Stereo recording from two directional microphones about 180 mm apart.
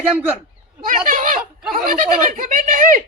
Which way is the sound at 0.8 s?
50° right (ahead or behind).